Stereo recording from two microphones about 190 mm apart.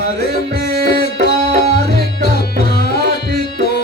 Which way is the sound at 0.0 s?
55° left (ahead or behind).